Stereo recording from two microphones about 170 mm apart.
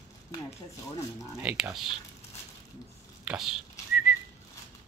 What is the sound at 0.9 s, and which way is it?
Speech, 20° left (ahead or behind).